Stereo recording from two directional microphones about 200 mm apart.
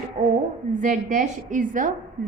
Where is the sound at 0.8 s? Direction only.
40° right (ahead or behind).